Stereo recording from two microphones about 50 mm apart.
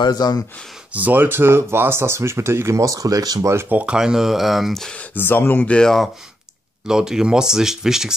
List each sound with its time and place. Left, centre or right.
0.9 s speech: right
3.6 s speech: right
3.9 s speech: centre
5.1 s speech: left
5.6 s speech: left
6.9 s speech: centre